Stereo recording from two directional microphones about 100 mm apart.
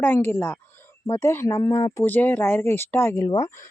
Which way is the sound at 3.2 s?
35° left (ahead or behind).